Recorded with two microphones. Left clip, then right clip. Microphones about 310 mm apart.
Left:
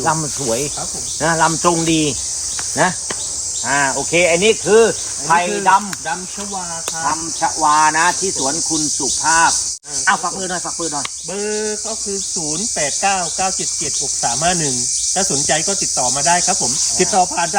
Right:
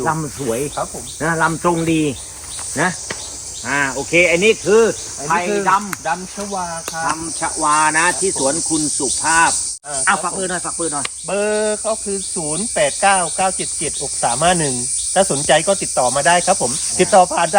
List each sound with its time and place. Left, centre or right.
0.0 s speech: left
3.7 s speech: left
7.4 s cricket: centre
11.3 s cricket: centre